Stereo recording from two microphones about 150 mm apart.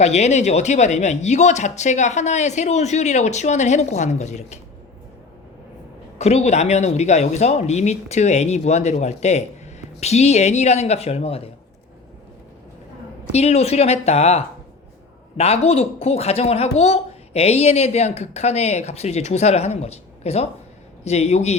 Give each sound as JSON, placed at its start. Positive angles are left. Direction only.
{"t": 0.0, "sound": "speech", "side_deg": 50}
{"t": 6.1, "sound": "speech", "side_deg": 45}
{"t": 13.3, "sound": "speech", "side_deg": 45}